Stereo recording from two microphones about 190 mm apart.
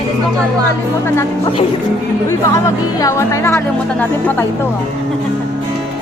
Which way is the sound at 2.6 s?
15° left (ahead or behind).